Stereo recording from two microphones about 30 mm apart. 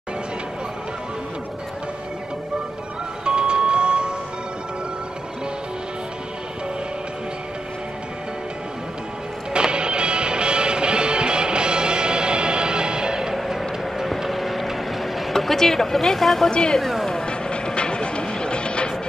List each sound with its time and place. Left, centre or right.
3.3 s a sound: right
9.5 s music: right
13.6 s vehicle: centre
15.3 s a sound: centre
16.4 s speech: left
17.3 s music: left